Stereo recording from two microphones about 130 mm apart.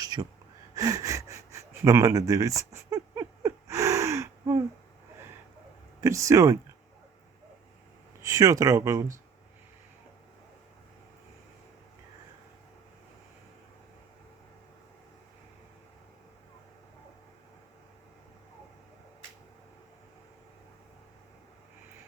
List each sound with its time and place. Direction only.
0.0 s gasp: 30° right (ahead or behind)
6.0 s speech: 25° right (ahead or behind)
8.2 s speech: 25° right (ahead or behind)